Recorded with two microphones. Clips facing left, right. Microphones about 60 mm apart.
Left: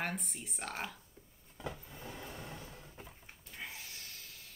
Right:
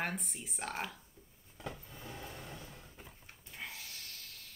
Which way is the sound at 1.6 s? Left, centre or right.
Centre.